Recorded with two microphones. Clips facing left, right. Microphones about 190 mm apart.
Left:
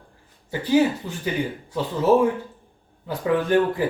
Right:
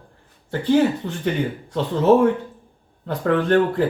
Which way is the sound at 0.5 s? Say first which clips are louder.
Right 2 dB; 10° left (ahead or behind).